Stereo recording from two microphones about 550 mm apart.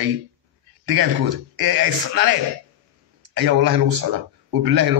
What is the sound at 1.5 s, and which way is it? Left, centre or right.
Speech, right.